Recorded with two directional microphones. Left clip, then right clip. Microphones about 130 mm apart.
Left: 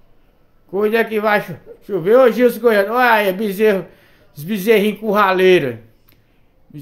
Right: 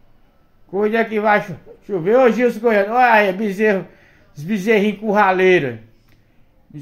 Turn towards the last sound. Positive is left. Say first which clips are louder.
# left 1 dB
turn(degrees=25)  # may be behind; listen again after turning